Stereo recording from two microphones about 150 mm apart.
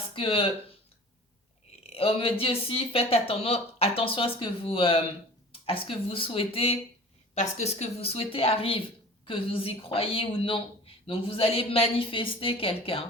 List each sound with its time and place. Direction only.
0.1 s speech: 35° left (ahead or behind)
1.9 s speech: 40° left (ahead or behind)
7.3 s speech: 50° left (ahead or behind)